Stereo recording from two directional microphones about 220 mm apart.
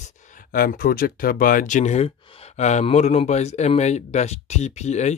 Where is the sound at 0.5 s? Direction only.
40° left (ahead or behind).